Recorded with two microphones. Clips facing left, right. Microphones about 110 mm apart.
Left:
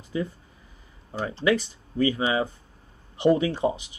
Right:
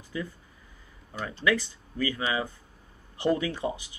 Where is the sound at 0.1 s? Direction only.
30° left (ahead or behind).